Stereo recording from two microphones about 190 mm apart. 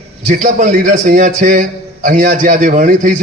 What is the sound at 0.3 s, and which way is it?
A man's voice, 40° right (ahead or behind).